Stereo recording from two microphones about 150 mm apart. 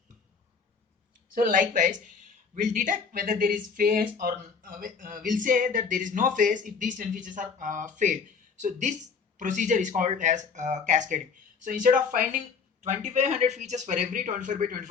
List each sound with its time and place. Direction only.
1.4 s speech: 60° right (ahead or behind)
12.8 s speech: 55° right (ahead or behind)